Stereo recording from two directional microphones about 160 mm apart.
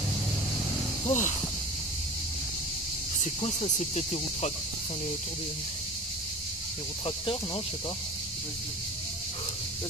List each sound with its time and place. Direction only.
1.0 s a sound: 50° left (ahead or behind)
3.3 s speech: 45° left (ahead or behind)
7.1 s speech: 35° left (ahead or behind)